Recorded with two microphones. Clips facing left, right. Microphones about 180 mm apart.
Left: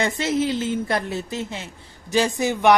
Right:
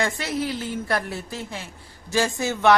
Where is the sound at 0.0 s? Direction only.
20° left (ahead or behind).